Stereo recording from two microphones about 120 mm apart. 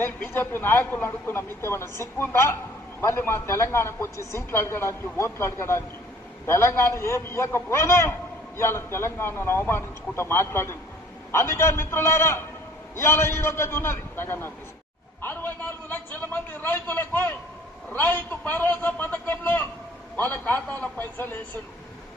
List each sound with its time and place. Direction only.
0.0 s speech: 15° left (ahead or behind)
15.9 s a sound: 15° left (ahead or behind)
20.1 s a man's voice: 15° left (ahead or behind)